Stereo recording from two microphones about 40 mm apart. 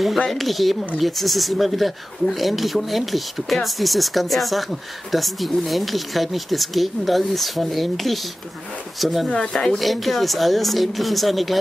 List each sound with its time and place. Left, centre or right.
0.3 s speech: centre
9.4 s speech: centre
9.8 s speech: centre